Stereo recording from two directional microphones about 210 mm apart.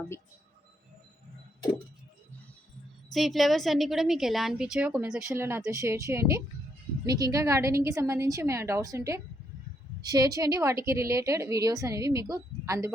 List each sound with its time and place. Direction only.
3.1 s a woman's voice: centre (ahead or behind)